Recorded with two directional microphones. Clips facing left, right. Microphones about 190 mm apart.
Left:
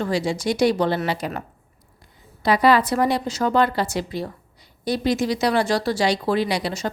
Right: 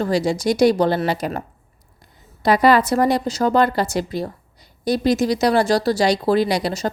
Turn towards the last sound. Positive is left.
turn(degrees=-40)  # may be behind; listen again after turning